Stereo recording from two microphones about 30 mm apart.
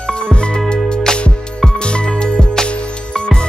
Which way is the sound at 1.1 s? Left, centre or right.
Left.